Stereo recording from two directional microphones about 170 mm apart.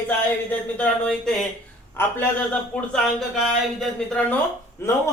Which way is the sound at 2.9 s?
Centre (ahead or behind).